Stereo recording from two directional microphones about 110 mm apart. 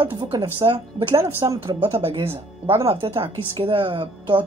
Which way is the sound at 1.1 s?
30° right (ahead or behind).